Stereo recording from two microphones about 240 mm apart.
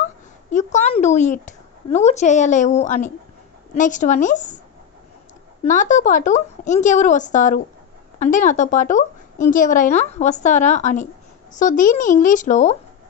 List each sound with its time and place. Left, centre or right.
0.5 s a woman's voice: left
5.6 s a woman's voice: left